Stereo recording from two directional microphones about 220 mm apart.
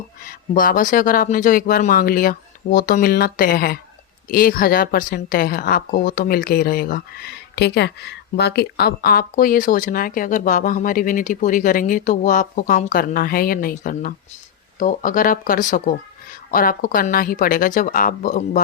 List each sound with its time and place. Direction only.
0.3 s speech: 40° left (ahead or behind)